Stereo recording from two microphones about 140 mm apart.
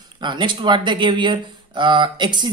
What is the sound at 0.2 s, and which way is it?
Speech, 35° right (ahead or behind).